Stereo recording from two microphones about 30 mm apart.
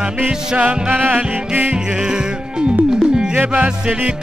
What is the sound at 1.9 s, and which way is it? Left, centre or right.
Music, right.